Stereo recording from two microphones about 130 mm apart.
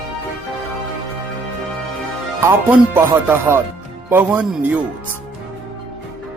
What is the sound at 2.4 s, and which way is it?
Speech, 15° right (ahead or behind).